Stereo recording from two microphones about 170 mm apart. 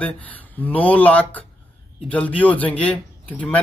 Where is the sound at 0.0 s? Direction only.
10° left (ahead or behind).